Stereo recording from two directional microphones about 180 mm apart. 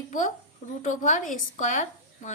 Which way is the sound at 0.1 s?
45° left (ahead or behind).